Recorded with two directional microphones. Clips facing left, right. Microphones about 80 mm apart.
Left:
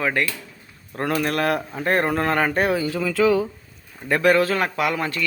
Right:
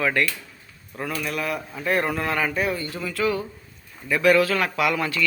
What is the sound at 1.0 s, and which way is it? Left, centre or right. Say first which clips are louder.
Speech: left 6 dB; left.